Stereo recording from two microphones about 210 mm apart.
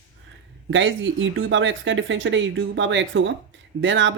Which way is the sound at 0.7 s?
65° right (ahead or behind).